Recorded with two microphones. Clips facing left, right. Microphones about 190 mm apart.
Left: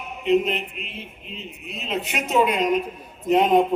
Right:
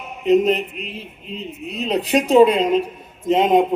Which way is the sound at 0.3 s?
40° right (ahead or behind).